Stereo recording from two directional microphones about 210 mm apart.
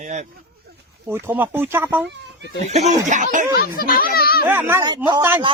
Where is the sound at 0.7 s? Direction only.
50° right (ahead or behind).